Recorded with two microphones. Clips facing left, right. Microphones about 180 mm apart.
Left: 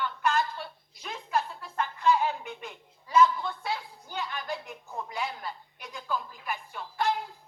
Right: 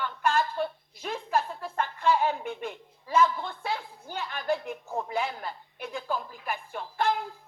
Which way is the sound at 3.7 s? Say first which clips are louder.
Right 1 dB; 50° right (ahead or behind).